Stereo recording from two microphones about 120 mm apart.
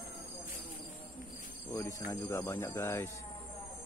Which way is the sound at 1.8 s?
20° left (ahead or behind).